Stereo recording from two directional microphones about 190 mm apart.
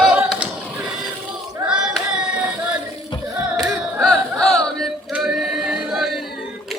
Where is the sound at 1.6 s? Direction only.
5° right (ahead or behind).